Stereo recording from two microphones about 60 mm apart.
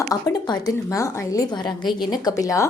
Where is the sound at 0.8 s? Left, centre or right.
Left.